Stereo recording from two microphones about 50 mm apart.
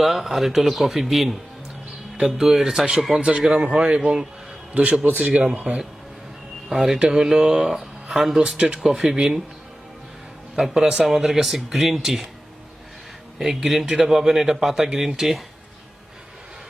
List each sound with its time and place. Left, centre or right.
0.0 s speech: centre
2.4 s speech: centre
3.2 s speech: right
4.7 s a man's voice: right
5.2 s speech: centre
5.5 s speech: right
6.7 s speech: centre
8.8 s speech: centre
10.5 s speech: centre
13.4 s speech: centre